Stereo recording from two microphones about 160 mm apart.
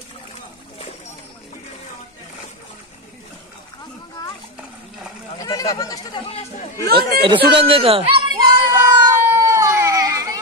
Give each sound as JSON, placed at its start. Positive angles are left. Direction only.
{"t": 5.4, "sound": "a sound", "side_deg": 20}
{"t": 6.9, "sound": "speech", "side_deg": -80}
{"t": 7.5, "sound": "children playing", "side_deg": -35}
{"t": 8.6, "sound": "baby cry", "side_deg": -20}